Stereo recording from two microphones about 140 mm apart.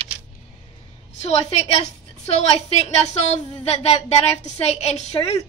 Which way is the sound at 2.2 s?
50° left (ahead or behind).